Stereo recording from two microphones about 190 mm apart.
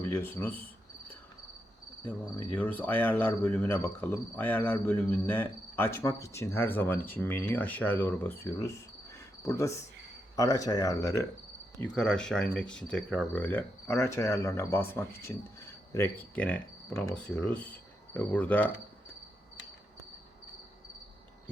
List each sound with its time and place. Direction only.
0.1 s speech: 10° left (ahead or behind)
2.0 s speech: 10° left (ahead or behind)
11.8 s speech: 5° left (ahead or behind)